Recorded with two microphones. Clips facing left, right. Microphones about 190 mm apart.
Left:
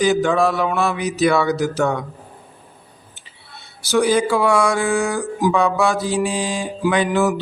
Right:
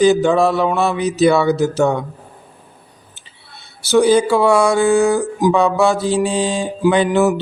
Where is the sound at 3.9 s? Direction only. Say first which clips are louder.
Right 4 dB; 25° right (ahead or behind).